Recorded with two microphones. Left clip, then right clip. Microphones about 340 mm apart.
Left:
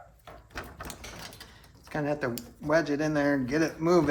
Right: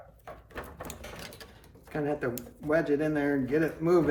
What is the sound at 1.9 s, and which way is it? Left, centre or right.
Speech, left.